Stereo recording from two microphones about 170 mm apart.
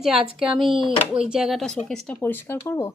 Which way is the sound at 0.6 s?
30° right (ahead or behind).